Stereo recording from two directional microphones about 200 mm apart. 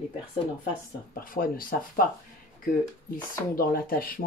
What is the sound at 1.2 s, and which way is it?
Speech, 45° left (ahead or behind).